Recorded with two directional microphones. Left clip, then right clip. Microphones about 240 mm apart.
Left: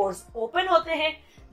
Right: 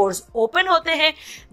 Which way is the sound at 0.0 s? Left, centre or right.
Right.